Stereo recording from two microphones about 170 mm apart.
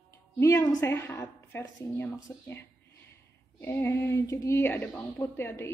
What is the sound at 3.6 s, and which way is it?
A woman's voice, 15° left (ahead or behind).